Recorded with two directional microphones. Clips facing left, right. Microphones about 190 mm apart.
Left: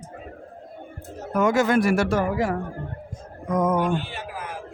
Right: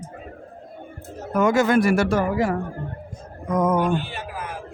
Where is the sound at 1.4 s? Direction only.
75° right (ahead or behind).